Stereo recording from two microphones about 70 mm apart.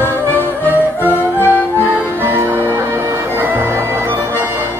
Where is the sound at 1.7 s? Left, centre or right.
Right.